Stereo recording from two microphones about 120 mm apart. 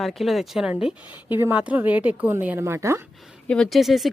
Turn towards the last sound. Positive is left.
turn(degrees=0)  # may be behind; listen again after turning